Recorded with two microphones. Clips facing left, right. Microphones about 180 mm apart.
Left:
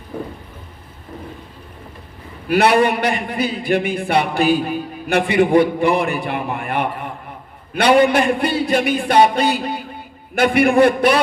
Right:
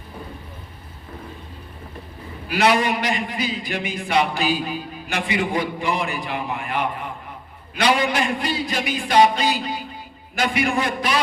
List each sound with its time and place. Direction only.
2.5 s a man's voice: 55° left (ahead or behind)